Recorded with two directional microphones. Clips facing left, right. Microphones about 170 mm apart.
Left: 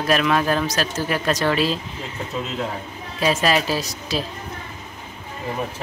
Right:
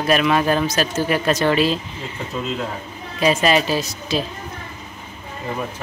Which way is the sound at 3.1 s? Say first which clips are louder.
Right 3 dB; centre (ahead or behind).